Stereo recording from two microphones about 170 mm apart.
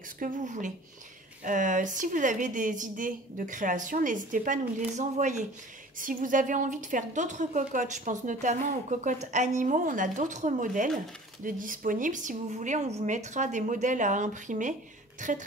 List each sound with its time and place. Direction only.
0.2 s a woman's voice: 50° right (ahead or behind)